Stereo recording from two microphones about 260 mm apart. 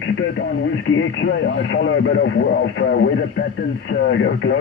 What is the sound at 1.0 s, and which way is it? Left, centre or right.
Speech, left.